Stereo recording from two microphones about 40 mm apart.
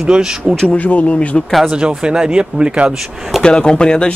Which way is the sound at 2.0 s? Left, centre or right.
Right.